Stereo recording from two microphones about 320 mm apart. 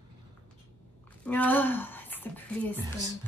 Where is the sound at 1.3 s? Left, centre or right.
Centre.